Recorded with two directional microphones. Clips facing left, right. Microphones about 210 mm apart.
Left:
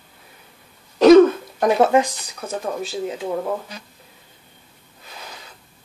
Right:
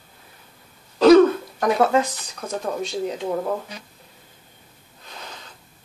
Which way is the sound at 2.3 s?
5° left (ahead or behind).